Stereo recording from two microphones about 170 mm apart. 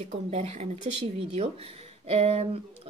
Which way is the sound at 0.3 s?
40° right (ahead or behind).